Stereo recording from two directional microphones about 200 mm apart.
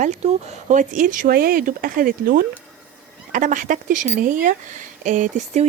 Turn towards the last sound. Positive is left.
turn(degrees=-40)  # may be behind; listen again after turning